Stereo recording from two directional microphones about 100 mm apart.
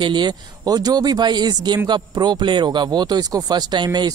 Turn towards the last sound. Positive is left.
turn(degrees=-45)  # may be behind; listen again after turning